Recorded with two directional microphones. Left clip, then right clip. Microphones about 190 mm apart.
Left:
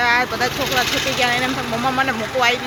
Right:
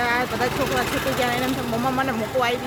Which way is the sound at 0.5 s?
40° right (ahead or behind).